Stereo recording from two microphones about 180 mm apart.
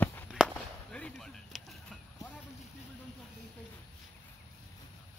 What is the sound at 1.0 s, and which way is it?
Basketball bounce, 5° left (ahead or behind).